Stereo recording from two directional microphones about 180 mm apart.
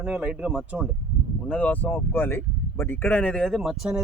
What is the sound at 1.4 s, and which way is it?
Speech, 10° left (ahead or behind).